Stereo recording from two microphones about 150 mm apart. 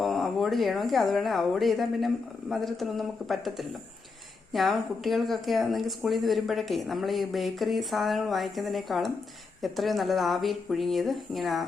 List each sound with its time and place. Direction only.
0.0 s speech: centre (ahead or behind)